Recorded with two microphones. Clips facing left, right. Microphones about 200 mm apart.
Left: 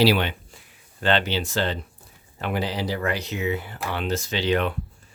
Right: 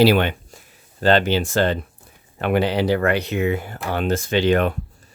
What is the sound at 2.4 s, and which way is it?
Speech, 65° right (ahead or behind).